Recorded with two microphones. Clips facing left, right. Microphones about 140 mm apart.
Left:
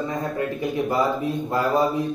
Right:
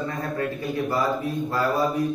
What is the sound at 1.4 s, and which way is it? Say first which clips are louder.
Speech: left 3 dB; 20° left (ahead or behind).